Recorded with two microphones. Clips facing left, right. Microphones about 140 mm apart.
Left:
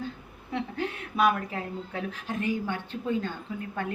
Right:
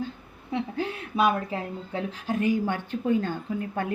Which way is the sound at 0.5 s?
30° right (ahead or behind).